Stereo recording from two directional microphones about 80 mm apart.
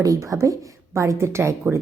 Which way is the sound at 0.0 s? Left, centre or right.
Right.